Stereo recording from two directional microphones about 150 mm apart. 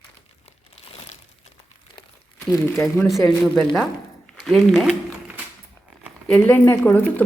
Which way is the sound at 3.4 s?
5° left (ahead or behind).